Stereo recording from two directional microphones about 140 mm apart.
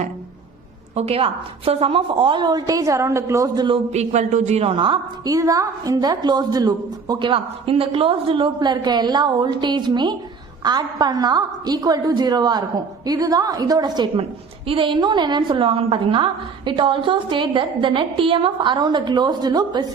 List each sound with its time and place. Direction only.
0.9 s a woman's voice: 45° right (ahead or behind); by 3.8 s 30° right (ahead or behind)
3.9 s a man's voice: 55° right (ahead or behind)
4.8 s a woman's voice: 30° right (ahead or behind)